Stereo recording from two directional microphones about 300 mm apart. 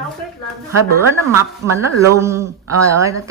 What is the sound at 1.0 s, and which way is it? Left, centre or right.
Speech, centre.